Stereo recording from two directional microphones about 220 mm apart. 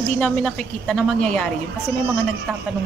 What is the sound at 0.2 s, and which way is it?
A woman's voice, centre (ahead or behind).